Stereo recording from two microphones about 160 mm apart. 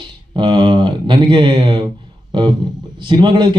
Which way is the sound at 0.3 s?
30° right (ahead or behind).